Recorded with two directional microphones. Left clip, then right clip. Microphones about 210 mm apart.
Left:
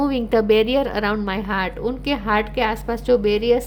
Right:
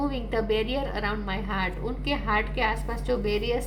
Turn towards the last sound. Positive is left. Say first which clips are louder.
# left 10 dB
turn(degrees=50)  # may be behind; listen again after turning